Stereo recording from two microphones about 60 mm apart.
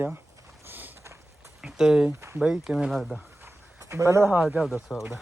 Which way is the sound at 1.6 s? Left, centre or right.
Centre.